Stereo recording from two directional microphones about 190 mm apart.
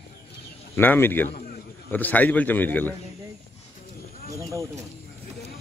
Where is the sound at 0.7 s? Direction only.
10° left (ahead or behind).